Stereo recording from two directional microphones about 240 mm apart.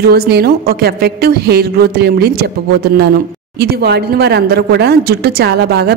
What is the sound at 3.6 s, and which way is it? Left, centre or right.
A woman's voice, right.